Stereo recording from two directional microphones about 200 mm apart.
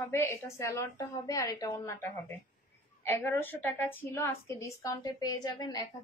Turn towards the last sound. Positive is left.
turn(degrees=20)  # may be behind; listen again after turning